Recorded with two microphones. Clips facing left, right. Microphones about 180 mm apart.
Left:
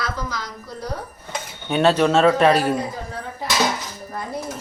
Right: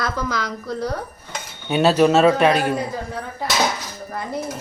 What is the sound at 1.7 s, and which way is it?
Speech, 5° right (ahead or behind).